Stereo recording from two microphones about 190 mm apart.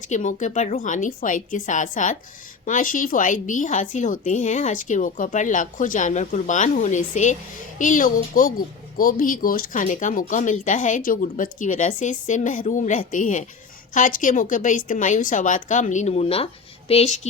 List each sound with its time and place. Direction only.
0.1 s a woman's voice: 40° left (ahead or behind)